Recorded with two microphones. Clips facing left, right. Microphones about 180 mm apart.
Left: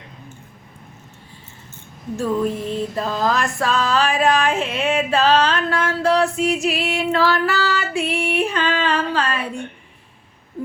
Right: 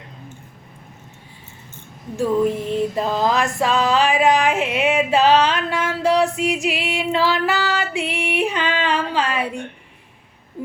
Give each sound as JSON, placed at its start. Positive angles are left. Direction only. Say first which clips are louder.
{"t": 2.1, "sound": "music", "louder": "right 2 dB", "side_deg": -15}